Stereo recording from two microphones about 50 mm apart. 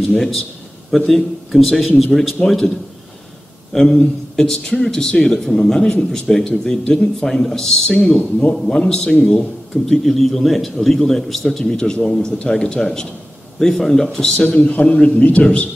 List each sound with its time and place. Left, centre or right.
0.0 s a man's voice: centre
3.7 s a man's voice: centre
4.5 s speech: centre
10.0 s a man's voice: centre
14.1 s a man's voice: centre